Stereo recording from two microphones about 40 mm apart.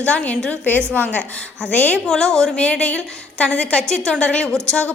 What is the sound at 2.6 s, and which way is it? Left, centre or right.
A woman's voice, left.